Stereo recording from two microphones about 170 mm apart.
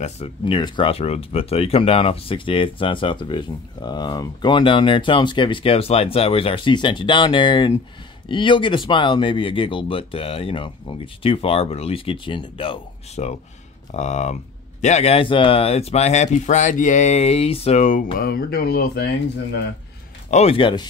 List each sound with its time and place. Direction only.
0.0 s speech: 35° left (ahead or behind)
18.1 s speech: 60° left (ahead or behind)
20.2 s speech: 40° left (ahead or behind)